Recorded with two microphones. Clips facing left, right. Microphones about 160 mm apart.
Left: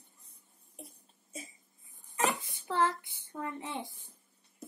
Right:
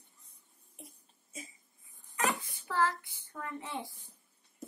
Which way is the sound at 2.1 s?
25° left (ahead or behind).